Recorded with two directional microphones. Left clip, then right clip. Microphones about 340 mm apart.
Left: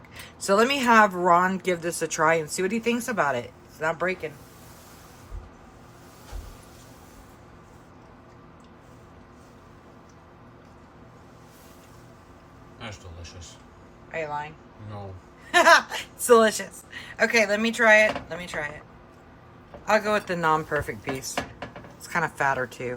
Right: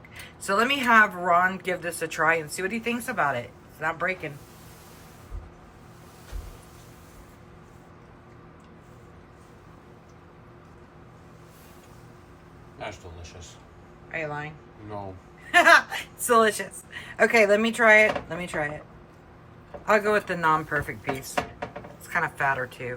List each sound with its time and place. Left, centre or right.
0.2 s a woman's voice: centre
12.8 s a sound: centre
14.1 s speech: centre
15.5 s a woman's voice: centre
19.9 s a woman's voice: centre